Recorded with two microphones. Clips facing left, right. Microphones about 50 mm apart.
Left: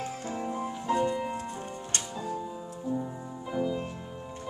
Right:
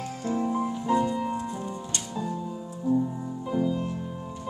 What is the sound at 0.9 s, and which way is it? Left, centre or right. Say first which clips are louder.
Music: right 2 dB; left.